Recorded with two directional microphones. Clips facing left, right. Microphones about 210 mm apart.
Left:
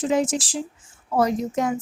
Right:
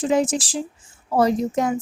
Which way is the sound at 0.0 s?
35° right (ahead or behind).